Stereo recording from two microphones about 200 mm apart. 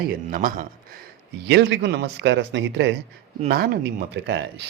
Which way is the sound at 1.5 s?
60° right (ahead or behind).